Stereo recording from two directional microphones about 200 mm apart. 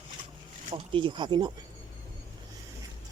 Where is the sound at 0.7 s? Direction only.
25° right (ahead or behind).